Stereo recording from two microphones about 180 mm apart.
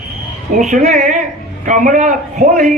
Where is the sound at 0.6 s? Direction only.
45° right (ahead or behind).